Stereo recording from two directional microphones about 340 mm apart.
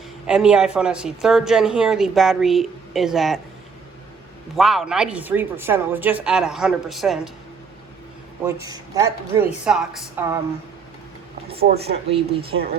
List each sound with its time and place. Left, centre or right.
0.3 s speech: centre
4.5 s speech: centre
8.4 s speech: centre
11.4 s speech: centre